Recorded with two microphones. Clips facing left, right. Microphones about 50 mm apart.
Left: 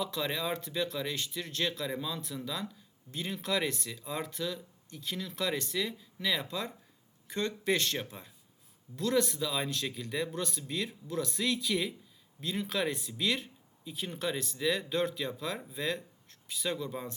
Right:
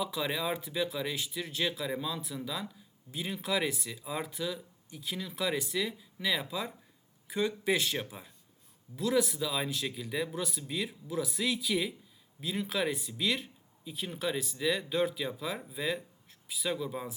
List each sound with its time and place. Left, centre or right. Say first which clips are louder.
0.0 s speech: right 1 dB; centre